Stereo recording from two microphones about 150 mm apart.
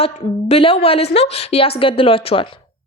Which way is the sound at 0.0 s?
40° left (ahead or behind).